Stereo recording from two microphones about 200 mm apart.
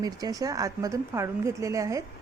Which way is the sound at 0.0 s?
20° right (ahead or behind).